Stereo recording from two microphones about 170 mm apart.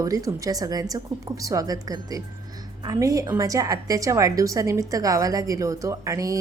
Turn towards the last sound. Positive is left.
turn(degrees=-20)  # may be behind; listen again after turning